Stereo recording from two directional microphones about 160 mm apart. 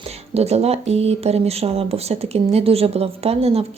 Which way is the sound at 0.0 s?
40° right (ahead or behind).